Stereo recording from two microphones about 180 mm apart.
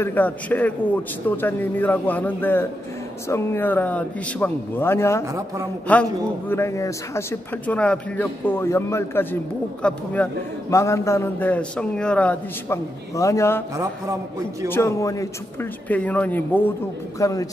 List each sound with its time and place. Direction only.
0.0 s speech: 10° left (ahead or behind)
14.7 s a man's voice: 15° left (ahead or behind)